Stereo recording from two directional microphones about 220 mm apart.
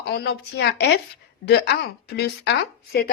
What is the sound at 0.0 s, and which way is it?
A woman's voice, 45° left (ahead or behind).